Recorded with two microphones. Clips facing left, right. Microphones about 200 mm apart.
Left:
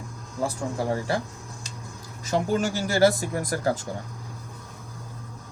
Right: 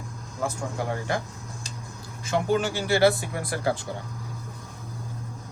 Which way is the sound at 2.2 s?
40° left (ahead or behind).